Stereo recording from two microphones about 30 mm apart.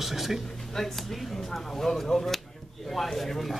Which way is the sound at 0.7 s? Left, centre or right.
Centre.